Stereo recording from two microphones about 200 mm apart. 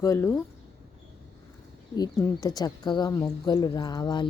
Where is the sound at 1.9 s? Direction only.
20° left (ahead or behind).